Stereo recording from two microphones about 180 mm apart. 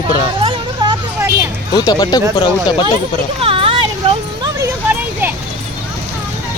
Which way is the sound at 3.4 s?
30° right (ahead or behind).